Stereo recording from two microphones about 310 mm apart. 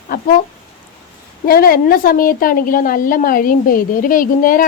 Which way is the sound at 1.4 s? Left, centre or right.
Left.